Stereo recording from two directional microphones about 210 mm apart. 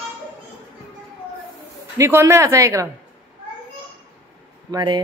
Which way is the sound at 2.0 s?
10° right (ahead or behind).